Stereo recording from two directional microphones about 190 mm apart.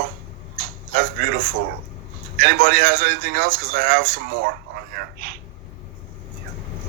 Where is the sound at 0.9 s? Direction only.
50° right (ahead or behind).